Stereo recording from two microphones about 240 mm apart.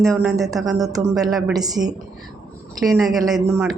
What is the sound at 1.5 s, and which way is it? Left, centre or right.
Speech, centre.